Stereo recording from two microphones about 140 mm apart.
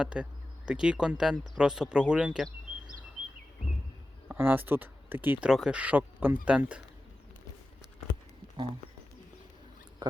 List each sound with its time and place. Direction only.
0.0 s speech: 10° right (ahead or behind)
4.3 s speech: 15° right (ahead or behind)
10.0 s a sound: 30° right (ahead or behind)